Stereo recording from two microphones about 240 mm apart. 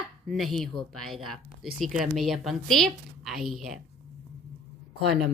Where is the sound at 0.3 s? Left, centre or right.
Centre.